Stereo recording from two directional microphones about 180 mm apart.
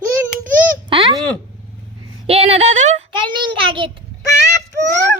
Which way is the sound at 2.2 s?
35° right (ahead or behind).